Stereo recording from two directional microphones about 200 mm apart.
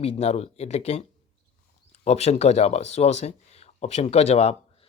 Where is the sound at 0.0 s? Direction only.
30° left (ahead or behind).